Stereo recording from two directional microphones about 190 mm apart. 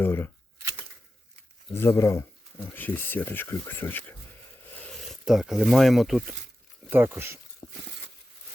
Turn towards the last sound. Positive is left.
turn(degrees=20)  # may be behind; listen again after turning